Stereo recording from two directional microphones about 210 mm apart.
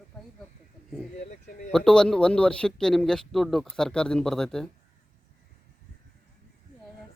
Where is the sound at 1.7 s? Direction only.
5° left (ahead or behind).